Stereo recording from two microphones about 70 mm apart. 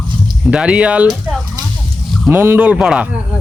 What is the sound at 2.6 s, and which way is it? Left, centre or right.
Speech, centre.